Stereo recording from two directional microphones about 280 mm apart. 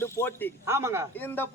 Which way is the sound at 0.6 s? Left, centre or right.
Centre.